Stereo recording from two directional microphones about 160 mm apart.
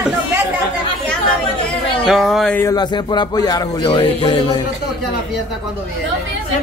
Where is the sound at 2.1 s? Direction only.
Centre (ahead or behind).